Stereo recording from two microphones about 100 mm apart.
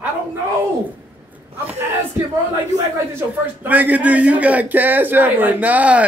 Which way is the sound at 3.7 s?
15° right (ahead or behind).